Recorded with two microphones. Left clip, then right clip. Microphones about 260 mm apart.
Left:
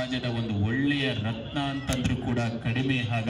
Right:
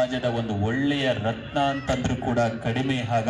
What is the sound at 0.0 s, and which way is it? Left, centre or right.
A man's voice, right.